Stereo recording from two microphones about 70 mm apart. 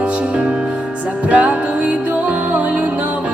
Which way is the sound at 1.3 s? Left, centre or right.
Centre.